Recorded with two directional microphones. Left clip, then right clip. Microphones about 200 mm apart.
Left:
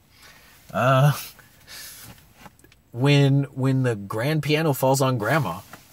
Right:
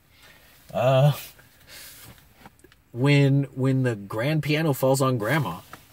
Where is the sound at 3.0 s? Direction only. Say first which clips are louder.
Left 1 dB; 10° left (ahead or behind).